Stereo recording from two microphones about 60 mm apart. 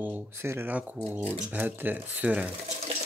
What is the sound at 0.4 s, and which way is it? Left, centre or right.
Speech, right.